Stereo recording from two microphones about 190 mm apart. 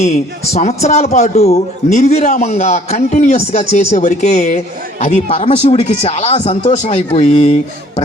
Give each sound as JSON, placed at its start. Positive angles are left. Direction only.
{"t": 0.0, "sound": "a man's voice", "side_deg": 35}